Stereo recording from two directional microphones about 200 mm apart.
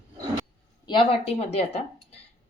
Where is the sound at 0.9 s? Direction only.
25° left (ahead or behind).